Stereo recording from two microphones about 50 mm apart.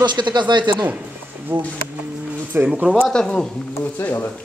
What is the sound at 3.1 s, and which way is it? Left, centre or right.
Speech, centre.